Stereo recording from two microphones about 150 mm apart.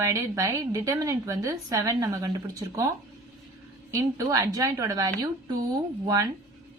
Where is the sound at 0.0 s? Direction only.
20° right (ahead or behind).